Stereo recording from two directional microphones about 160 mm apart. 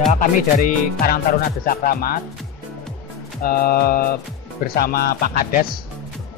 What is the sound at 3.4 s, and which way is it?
Music, 65° left (ahead or behind).